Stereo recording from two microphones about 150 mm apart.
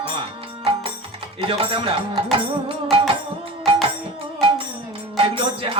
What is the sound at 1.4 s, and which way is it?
Music, 35° right (ahead or behind).